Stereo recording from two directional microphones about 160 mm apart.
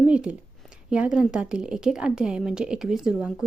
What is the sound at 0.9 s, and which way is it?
A woman's voice, 5° right (ahead or behind).